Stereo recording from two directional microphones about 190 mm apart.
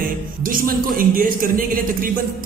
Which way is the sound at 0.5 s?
50° right (ahead or behind).